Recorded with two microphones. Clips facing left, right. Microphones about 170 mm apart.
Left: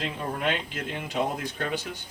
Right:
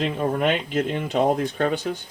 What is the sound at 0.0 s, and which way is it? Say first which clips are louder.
Speech: right 7 dB; 55° right (ahead or behind).